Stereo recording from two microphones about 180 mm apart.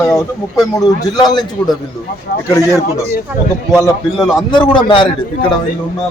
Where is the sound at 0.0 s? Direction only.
15° left (ahead or behind).